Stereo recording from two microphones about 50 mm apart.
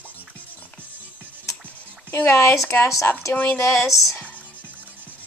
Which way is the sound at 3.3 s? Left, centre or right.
Left.